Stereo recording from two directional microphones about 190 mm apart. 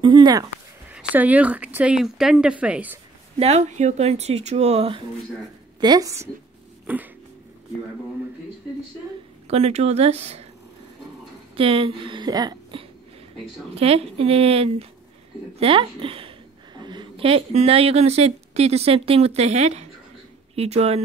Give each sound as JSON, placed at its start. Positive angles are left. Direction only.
{"t": 0.0, "sound": "a sound", "side_deg": -25}
{"t": 0.9, "sound": "speech", "side_deg": -10}
{"t": 3.3, "sound": "a woman's voice", "side_deg": -35}
{"t": 5.8, "sound": "a woman's voice", "side_deg": -20}
{"t": 9.5, "sound": "a woman's voice", "side_deg": -35}
{"t": 11.5, "sound": "a woman's voice", "side_deg": -30}
{"t": 13.7, "sound": "a woman's voice", "side_deg": -30}